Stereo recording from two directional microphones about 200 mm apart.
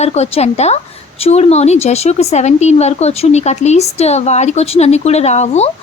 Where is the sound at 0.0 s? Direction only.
30° left (ahead or behind).